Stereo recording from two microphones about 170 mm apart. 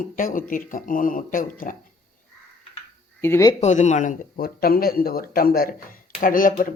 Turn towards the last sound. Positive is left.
turn(degrees=55)  # may be behind; listen again after turning